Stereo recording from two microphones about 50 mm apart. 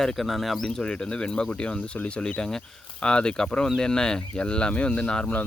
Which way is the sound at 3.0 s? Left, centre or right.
Centre.